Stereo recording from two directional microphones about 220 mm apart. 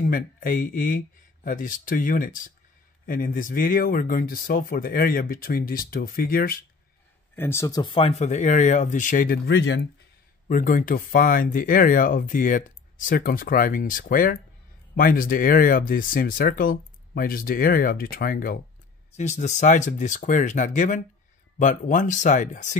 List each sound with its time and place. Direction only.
0.0 s speech: 40° left (ahead or behind)
7.3 s speech: 10° left (ahead or behind); by 9.8 s 50° left (ahead or behind)
10.5 s speech: 40° left (ahead or behind)